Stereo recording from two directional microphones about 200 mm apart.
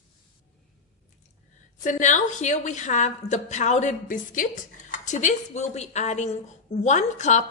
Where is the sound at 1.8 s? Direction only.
40° left (ahead or behind).